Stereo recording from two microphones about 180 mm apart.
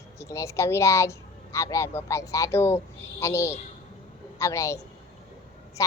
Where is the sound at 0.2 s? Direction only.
15° left (ahead or behind).